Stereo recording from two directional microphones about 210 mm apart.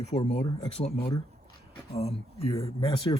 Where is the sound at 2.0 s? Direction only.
30° left (ahead or behind).